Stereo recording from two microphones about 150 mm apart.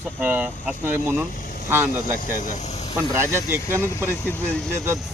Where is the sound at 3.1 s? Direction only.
15° right (ahead or behind).